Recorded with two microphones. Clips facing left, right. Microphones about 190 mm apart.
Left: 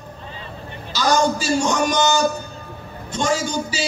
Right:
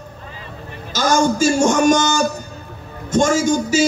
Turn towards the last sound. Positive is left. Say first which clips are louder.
# right 7 dB
turn(degrees=-45)  # may be behind; listen again after turning